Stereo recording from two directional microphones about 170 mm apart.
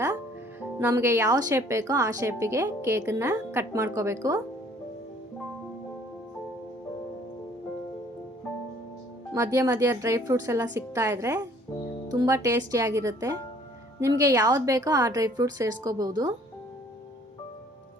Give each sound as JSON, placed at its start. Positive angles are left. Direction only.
{"t": 0.8, "sound": "a woman's voice", "side_deg": -15}
{"t": 9.3, "sound": "a woman's voice", "side_deg": -20}